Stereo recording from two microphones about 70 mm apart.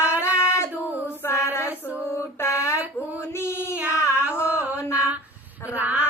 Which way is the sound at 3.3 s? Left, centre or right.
Left.